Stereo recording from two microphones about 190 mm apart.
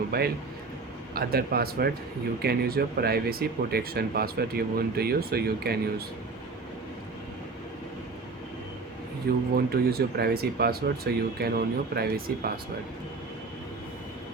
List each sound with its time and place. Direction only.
0.1 s speech: 55° right (ahead or behind)
9.3 s speech: 55° right (ahead or behind)